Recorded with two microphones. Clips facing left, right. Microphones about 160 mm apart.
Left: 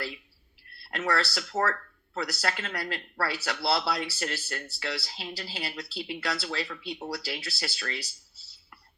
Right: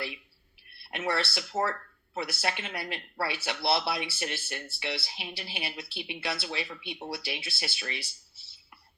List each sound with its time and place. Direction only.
0.9 s speech: 25° right (ahead or behind)